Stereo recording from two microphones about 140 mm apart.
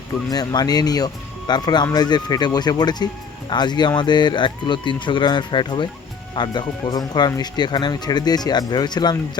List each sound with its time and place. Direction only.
0.3 s speech: 30° left (ahead or behind)